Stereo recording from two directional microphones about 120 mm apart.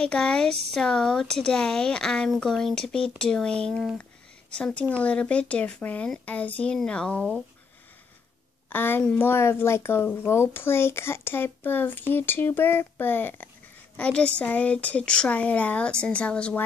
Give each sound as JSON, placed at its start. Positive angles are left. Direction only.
{"t": 0.0, "sound": "speech", "side_deg": 10}
{"t": 4.0, "sound": "a sound", "side_deg": 10}
{"t": 5.0, "sound": "speech", "side_deg": 10}
{"t": 8.6, "sound": "speech", "side_deg": 15}